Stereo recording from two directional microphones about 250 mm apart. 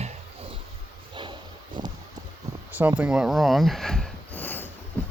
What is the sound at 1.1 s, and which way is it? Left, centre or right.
Dog, centre.